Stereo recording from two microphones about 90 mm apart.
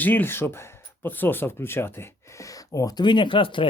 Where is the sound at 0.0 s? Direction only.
20° left (ahead or behind).